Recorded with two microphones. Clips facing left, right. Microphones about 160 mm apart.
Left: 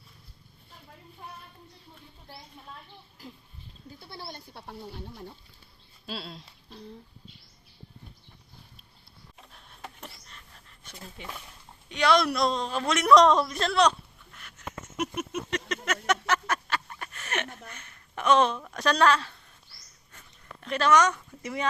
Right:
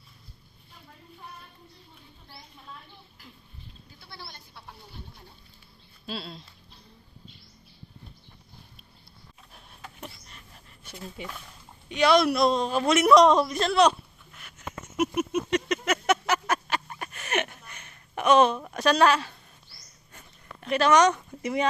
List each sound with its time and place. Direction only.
6.1 s a man's voice: 5° left (ahead or behind)
11.2 s a man's voice: 10° right (ahead or behind)
14.9 s a sound: 10° right (ahead or behind)